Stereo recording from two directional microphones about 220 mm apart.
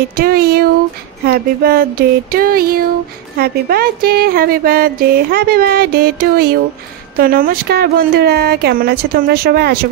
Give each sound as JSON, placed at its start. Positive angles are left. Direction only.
{"t": 0.1, "sound": "speech", "side_deg": -45}